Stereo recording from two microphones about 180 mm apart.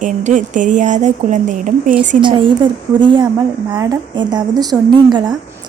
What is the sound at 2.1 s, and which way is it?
A woman's voice, 25° right (ahead or behind).